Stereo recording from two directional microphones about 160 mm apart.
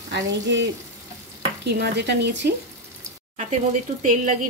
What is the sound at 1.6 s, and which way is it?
Speech, 90° right.